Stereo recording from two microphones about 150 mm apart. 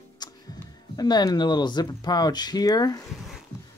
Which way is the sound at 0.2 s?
30° left (ahead or behind).